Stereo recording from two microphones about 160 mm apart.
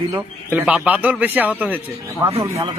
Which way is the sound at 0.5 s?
10° right (ahead or behind).